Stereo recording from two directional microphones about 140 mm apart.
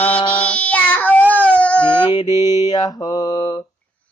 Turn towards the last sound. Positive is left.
turn(degrees=30)  # may be behind; listen again after turning